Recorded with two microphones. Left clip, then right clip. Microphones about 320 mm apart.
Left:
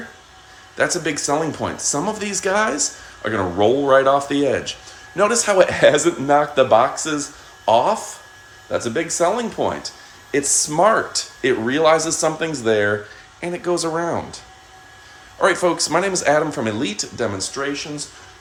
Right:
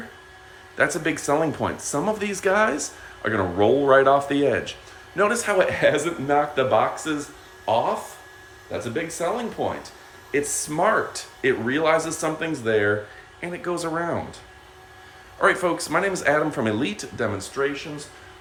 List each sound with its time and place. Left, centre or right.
0.8 s speech: centre